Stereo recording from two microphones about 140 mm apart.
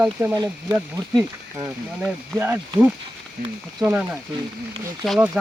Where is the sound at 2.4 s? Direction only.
15° right (ahead or behind).